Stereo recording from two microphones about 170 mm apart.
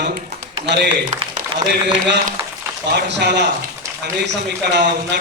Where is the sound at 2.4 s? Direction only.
15° right (ahead or behind).